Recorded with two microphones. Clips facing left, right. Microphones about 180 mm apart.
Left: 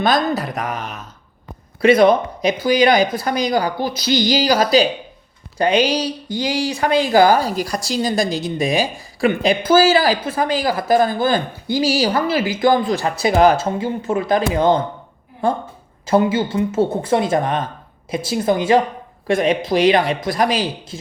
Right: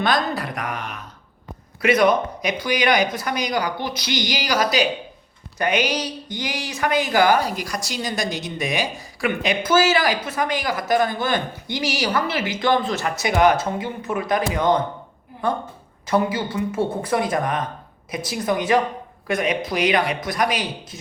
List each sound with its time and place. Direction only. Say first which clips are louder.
0.0 s a woman's voice: left 4 dB; 25° left (ahead or behind)